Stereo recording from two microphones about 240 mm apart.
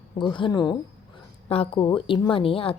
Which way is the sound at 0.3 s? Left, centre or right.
Centre.